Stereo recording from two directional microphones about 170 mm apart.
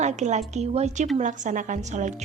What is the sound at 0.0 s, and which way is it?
A woman's voice, 45° right (ahead or behind).